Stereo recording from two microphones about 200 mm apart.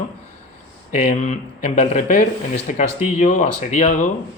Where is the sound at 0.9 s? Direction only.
40° left (ahead or behind).